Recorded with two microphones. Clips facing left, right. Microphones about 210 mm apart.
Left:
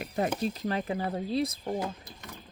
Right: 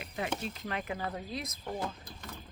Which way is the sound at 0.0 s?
40° left (ahead or behind).